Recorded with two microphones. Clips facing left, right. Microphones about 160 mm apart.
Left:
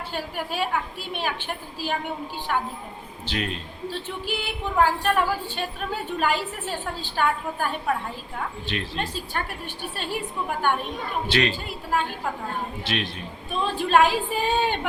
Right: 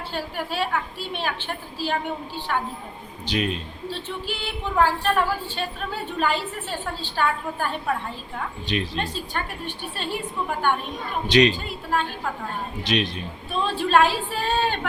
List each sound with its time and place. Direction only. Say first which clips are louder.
0.1 s a woman's voice: right 1 dB; 10° left (ahead or behind)
3.2 s a man's voice: right 4 dB; 20° right (ahead or behind)
3.8 s a woman's voice: left 1 dB; 10° left (ahead or behind)
8.6 s speech: right 8 dB; 15° right (ahead or behind)
9.0 s a woman's voice: right 1 dB; 10° left (ahead or behind)
11.3 s speech: right 7 dB; 15° right (ahead or behind)
11.5 s a woman's voice: right 1 dB; 10° left (ahead or behind)
12.8 s a man's voice: right 4 dB; 20° right (ahead or behind)
13.5 s a woman's voice: right 1 dB; 15° left (ahead or behind)